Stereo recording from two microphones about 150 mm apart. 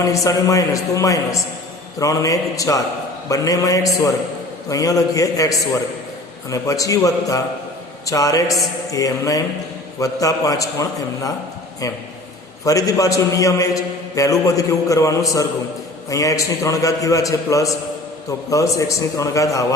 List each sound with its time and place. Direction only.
0.0 s a man's voice: 20° left (ahead or behind)
12.6 s a man's voice: 20° left (ahead or behind)